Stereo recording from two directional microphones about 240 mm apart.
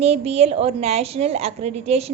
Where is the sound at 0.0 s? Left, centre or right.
Right.